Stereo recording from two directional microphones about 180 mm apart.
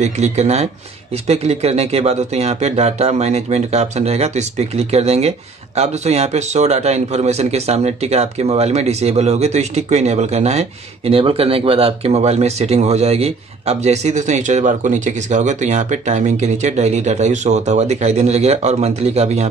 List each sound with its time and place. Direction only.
0.0 s a man's voice: 40° right (ahead or behind)